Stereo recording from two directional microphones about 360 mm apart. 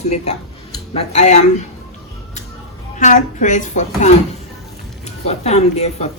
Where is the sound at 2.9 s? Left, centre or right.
Left.